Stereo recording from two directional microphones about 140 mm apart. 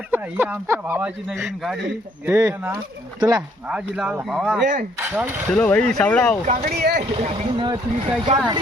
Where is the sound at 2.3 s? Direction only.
15° right (ahead or behind).